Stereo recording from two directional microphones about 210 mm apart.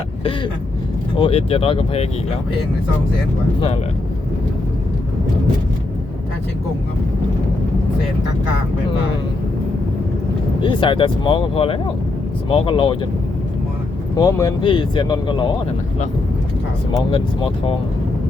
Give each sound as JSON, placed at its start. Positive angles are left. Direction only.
{"t": 1.1, "sound": "speech", "side_deg": 25}
{"t": 10.6, "sound": "speech", "side_deg": 25}
{"t": 14.2, "sound": "speech", "side_deg": 15}
{"t": 17.1, "sound": "speech", "side_deg": 25}